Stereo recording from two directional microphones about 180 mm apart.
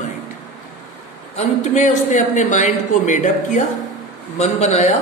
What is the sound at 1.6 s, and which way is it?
A man's voice, 40° left (ahead or behind).